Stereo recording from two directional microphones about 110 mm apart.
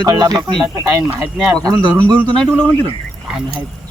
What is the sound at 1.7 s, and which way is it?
Speech, 10° left (ahead or behind).